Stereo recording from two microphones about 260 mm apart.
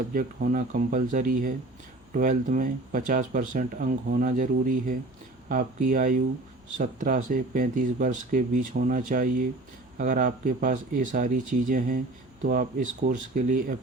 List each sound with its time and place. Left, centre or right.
0.1 s speech: right